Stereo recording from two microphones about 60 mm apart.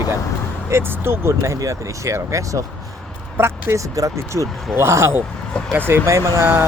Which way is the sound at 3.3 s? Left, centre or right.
Right.